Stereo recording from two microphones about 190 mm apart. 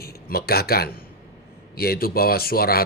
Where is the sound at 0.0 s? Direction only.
55° left (ahead or behind).